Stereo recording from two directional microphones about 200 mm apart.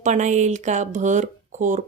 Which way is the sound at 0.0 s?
35° right (ahead or behind).